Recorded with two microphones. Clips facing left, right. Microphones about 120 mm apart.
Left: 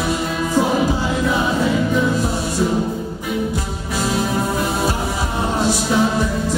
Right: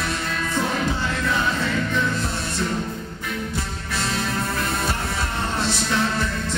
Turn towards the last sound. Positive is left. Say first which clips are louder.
# left 6 dB
turn(degrees=10)  # may be behind; listen again after turning